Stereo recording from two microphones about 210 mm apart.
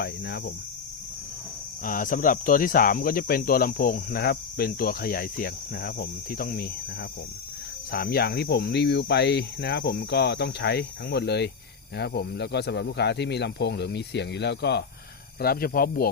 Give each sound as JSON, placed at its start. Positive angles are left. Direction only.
{"t": 0.0, "sound": "speech", "side_deg": 50}
{"t": 1.8, "sound": "speech", "side_deg": 40}
{"t": 7.9, "sound": "speech", "side_deg": 45}